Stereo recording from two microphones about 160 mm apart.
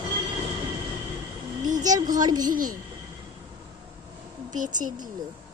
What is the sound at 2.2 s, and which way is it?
Speech, 25° right (ahead or behind).